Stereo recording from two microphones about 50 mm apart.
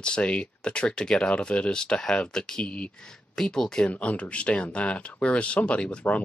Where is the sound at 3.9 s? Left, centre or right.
Left.